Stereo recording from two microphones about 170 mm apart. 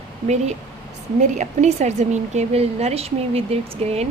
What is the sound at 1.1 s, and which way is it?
A woman's voice, 45° right (ahead or behind).